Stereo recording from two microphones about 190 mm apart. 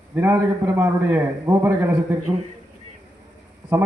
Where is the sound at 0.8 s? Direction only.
10° right (ahead or behind).